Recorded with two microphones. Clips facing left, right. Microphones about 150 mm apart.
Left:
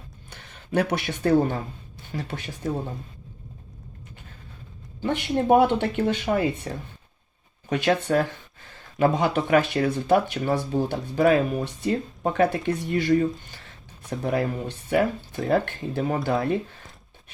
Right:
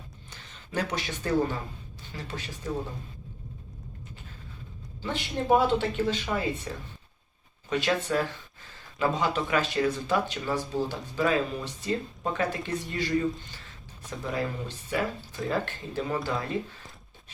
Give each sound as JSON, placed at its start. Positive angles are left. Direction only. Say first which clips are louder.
{"t": 0.3, "sound": "speech", "louder": "left 12 dB", "side_deg": 60}
{"t": 4.9, "sound": "speech", "louder": "left 7 dB", "side_deg": 55}
{"t": 6.7, "sound": "speech", "louder": "left 4 dB", "side_deg": 45}